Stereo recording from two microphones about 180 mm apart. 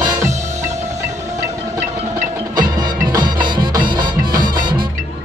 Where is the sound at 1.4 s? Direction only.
15° right (ahead or behind).